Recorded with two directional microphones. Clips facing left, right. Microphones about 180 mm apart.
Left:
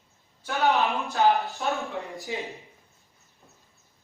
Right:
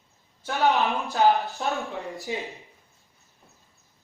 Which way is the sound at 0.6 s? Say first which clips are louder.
Right 1 dB; centre (ahead or behind).